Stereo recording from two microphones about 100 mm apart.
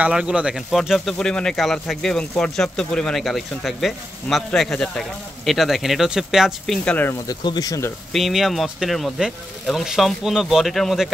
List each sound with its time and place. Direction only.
0.0 s speech: 10° right (ahead or behind); by 7.1 s 10° left (ahead or behind)
7.2 s speech: 40° left (ahead or behind)
8.1 s speech: centre (ahead or behind)